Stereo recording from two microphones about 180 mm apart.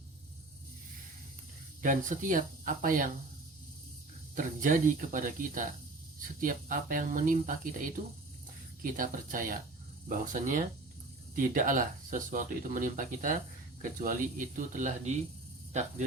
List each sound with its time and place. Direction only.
1.8 s speech: 45° right (ahead or behind)
4.4 s speech: 45° right (ahead or behind)